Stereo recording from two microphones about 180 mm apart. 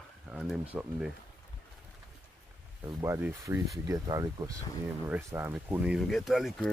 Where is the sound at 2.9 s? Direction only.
15° right (ahead or behind); by 6.7 s centre (ahead or behind).